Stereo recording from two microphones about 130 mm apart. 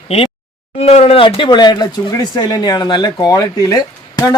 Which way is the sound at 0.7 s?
50° left (ahead or behind).